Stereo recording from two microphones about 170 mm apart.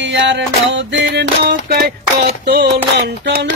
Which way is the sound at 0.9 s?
90° right.